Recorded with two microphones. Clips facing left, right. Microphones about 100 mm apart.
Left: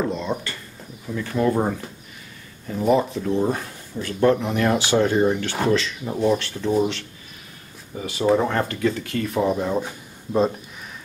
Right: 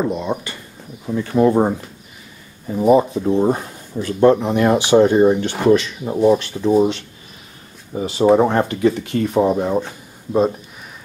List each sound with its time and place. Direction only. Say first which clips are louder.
0.1 s speech: right 4 dB; 15° right (ahead or behind)
7.9 s speech: right 6 dB; 30° right (ahead or behind)